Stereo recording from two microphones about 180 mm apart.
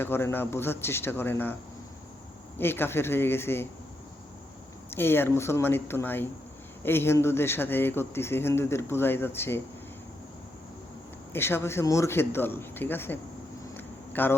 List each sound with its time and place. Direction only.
0.0 s a man's voice: 15° left (ahead or behind)
2.6 s a man's voice: 10° left (ahead or behind)
4.9 s a man's voice: 10° left (ahead or behind)
11.3 s a man's voice: 15° left (ahead or behind)
13.7 s a sound: 10° left (ahead or behind)